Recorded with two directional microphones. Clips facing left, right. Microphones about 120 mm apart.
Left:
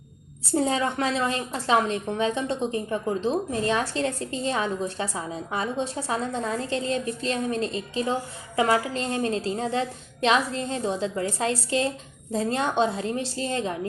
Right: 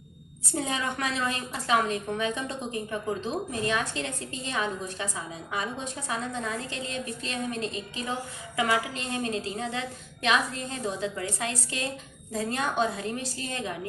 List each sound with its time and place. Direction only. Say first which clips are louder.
0.5 s a woman's voice: left 7 dB; 35° left (ahead or behind)